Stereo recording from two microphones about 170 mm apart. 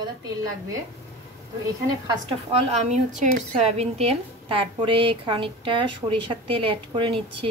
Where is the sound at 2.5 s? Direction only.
35° right (ahead or behind).